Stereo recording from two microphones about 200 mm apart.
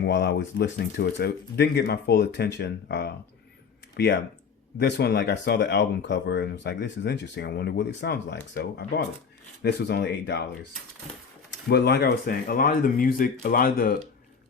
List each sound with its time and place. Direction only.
0.0 s speech: 55° left (ahead or behind)
11.7 s speech: 55° left (ahead or behind)